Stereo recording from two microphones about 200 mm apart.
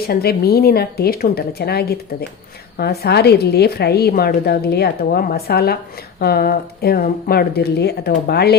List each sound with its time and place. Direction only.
0.1 s a woman's voice: 50° left (ahead or behind)